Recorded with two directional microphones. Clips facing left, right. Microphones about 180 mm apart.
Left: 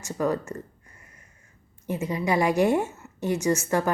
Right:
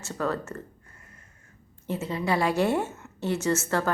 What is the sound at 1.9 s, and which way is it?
A woman's voice, 15° left (ahead or behind).